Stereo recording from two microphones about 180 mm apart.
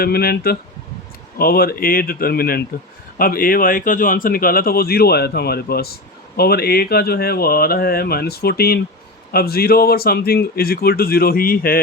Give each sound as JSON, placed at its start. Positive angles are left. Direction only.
{"t": 0.0, "sound": "speech", "side_deg": 60}